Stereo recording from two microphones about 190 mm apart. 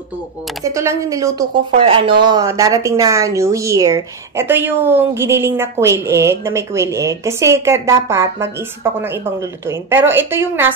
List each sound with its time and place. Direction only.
0.7 s speech: 15° right (ahead or behind)
1.8 s speech: 30° right (ahead or behind); by 10.7 s 10° right (ahead or behind)